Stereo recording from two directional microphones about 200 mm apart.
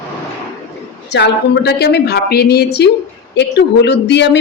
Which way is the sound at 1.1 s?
55° left (ahead or behind).